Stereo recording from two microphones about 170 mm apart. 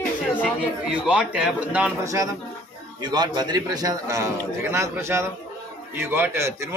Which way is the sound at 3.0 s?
25° right (ahead or behind).